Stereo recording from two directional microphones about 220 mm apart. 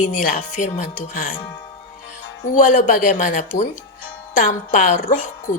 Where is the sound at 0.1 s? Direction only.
35° left (ahead or behind).